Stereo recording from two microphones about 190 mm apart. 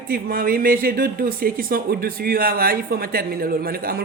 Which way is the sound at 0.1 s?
50° right (ahead or behind).